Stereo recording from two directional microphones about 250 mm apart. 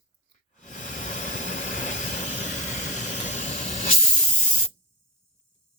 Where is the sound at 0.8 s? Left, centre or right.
Left.